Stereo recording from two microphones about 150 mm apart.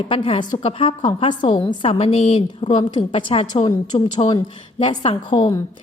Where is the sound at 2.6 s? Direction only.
30° left (ahead or behind).